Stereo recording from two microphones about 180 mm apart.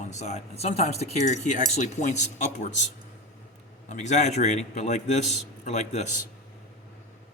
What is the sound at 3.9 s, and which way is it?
A man's voice, 40° left (ahead or behind).